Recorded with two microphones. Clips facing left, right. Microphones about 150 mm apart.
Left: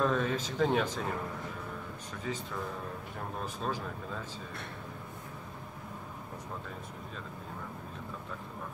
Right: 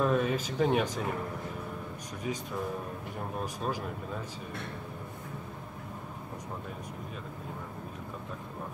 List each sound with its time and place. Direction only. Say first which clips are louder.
0.0 s speech: right 2 dB; 10° right (ahead or behind)
2.3 s speech: right 2 dB; 15° right (ahead or behind)
3.6 s speech: even; 10° right (ahead or behind)